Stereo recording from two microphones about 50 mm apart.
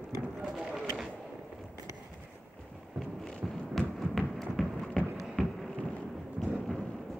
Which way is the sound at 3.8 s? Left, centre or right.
Centre.